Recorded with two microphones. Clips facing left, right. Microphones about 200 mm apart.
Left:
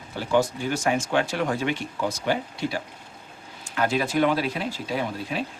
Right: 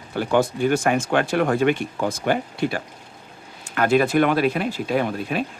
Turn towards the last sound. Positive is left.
turn(degrees=-60)  # may be behind; listen again after turning